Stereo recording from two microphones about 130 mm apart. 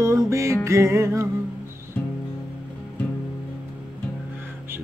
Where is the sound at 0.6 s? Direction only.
20° right (ahead or behind).